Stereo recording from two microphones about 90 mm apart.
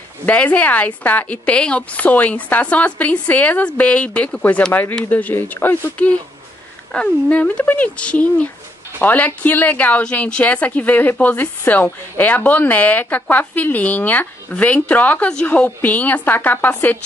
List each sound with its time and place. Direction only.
0.3 s speech: 15° left (ahead or behind)